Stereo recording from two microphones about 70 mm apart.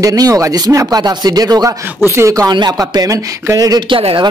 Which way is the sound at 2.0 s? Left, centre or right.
Right.